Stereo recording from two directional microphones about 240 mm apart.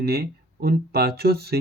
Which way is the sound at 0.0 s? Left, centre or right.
Right.